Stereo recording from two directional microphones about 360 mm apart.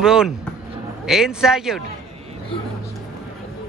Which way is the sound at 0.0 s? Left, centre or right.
Centre.